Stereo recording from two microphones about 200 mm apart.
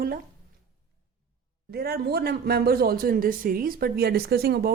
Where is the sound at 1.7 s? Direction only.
50° right (ahead or behind).